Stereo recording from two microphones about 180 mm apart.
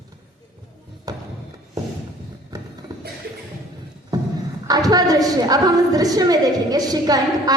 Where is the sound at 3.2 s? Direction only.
60° right (ahead or behind).